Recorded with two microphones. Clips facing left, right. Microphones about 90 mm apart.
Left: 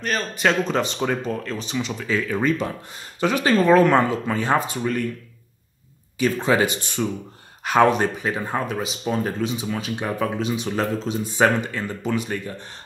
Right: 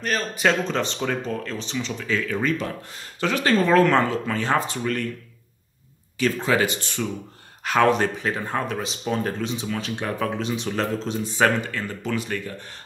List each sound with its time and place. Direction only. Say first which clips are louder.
0.0 s speech: even; centre (ahead or behind)
6.1 s speech: left 2 dB; 15° left (ahead or behind)
11.4 s speech: left 2 dB; 20° left (ahead or behind)